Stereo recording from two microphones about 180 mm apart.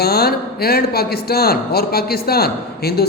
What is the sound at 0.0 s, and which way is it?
A woman's voice, 60° left (ahead or behind).